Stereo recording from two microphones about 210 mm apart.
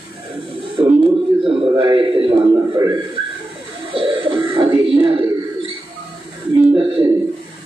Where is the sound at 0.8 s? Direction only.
25° right (ahead or behind).